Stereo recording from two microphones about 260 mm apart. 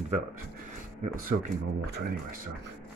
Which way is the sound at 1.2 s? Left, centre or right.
Right.